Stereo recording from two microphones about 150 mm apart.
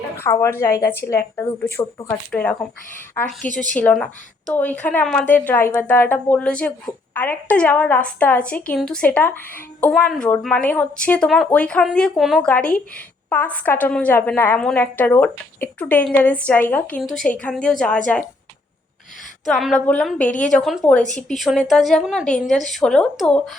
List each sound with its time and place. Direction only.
0.2 s a woman's voice: 15° left (ahead or behind)
3.4 s a woman's voice: 60° left (ahead or behind)
3.9 s a woman's voice: 5° left (ahead or behind)
12.5 s a woman's voice: 10° left (ahead or behind)
19.5 s a woman's voice: centre (ahead or behind)